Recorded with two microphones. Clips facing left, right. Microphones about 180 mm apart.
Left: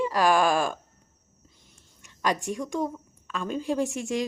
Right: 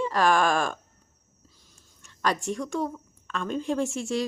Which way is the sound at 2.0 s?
15° left (ahead or behind).